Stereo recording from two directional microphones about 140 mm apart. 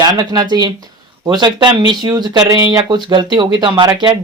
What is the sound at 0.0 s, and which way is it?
Speech, 30° right (ahead or behind).